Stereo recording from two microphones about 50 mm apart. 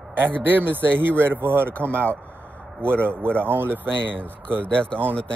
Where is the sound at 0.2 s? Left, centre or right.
Right.